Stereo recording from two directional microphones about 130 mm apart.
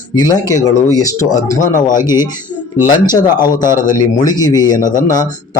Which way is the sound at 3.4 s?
30° left (ahead or behind).